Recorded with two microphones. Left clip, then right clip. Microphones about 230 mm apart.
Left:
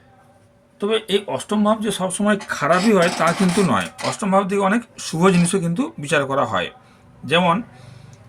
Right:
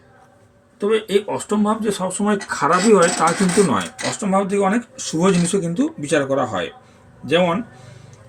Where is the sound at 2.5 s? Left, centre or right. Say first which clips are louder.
Right 4 dB; left.